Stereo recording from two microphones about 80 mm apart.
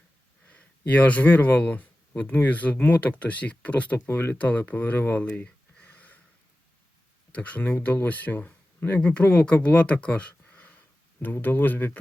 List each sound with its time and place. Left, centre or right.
0.4 s speech: centre
4.4 s speech: centre
5.4 s a sound: centre
7.3 s speech: centre